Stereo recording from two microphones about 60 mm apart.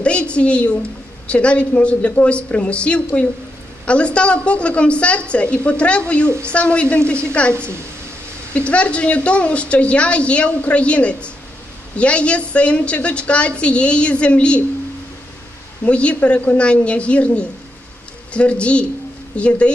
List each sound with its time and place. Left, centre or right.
0.0 s a woman's voice: centre
8.5 s a woman's voice: centre
15.8 s a woman's voice: left